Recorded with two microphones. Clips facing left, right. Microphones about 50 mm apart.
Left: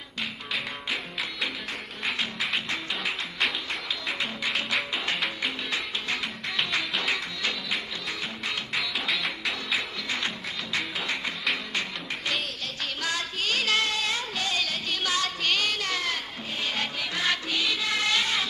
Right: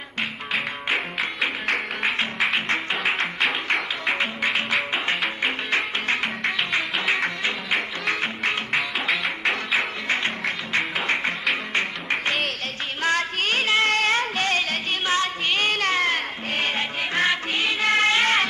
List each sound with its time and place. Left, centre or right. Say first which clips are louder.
0.8 s music: right 7 dB; right
3.6 s music: right 8 dB; right
8.1 s music: right 9 dB; right
8.7 s music: right 2 dB; centre
9.8 s music: right 7 dB; right
13.0 s music: right 8 dB; right
13.8 s music: right 8 dB; right